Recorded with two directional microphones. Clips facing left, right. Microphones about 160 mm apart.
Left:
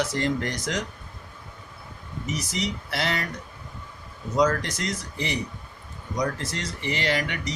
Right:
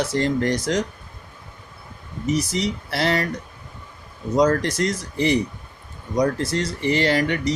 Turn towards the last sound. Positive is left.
turn(degrees=-35)  # may be behind; listen again after turning